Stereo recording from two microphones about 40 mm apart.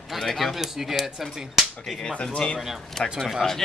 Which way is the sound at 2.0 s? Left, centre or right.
Left.